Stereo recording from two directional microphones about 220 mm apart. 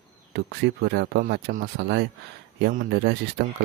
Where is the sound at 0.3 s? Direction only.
50° right (ahead or behind).